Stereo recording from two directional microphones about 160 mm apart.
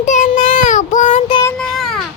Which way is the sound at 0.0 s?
50° left (ahead or behind).